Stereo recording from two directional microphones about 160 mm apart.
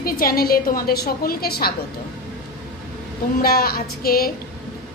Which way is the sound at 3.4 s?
70° left (ahead or behind).